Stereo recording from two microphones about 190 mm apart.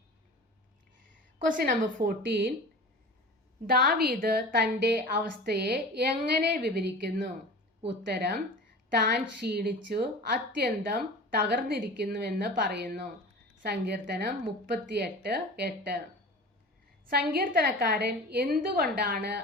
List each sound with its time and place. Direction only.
1.5 s a woman's voice: 50° right (ahead or behind)
3.7 s a woman's voice: 55° right (ahead or behind)
17.1 s a woman's voice: 55° right (ahead or behind)